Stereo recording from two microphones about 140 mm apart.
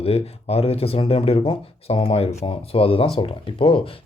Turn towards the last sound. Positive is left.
turn(degrees=40)  # may be behind; listen again after turning